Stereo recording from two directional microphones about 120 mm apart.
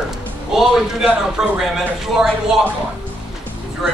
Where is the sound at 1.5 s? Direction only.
5° right (ahead or behind).